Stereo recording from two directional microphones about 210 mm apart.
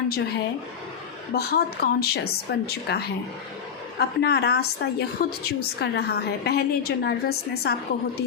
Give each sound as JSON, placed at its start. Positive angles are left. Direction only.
{"t": 1.3, "sound": "a woman's voice", "side_deg": 50}